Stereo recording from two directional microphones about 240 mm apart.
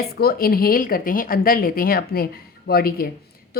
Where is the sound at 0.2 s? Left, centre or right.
Left.